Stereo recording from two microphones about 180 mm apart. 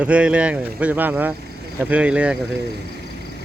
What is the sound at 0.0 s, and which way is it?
Speech, 5° right (ahead or behind).